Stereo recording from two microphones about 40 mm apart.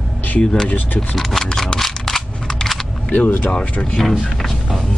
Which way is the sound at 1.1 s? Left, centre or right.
Centre.